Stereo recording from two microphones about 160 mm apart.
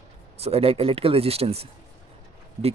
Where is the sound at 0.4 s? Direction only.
40° right (ahead or behind).